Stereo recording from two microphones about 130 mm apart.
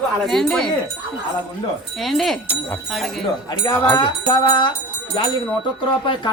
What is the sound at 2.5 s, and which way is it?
Speech, 15° left (ahead or behind).